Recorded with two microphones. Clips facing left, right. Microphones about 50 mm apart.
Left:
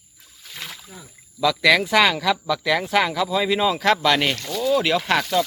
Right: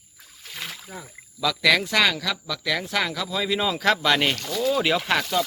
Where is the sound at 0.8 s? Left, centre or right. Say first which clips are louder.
Right 4 dB; right.